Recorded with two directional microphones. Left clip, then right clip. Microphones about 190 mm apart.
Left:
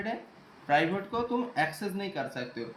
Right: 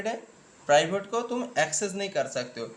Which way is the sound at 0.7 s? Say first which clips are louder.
Right 4 dB; 55° right (ahead or behind).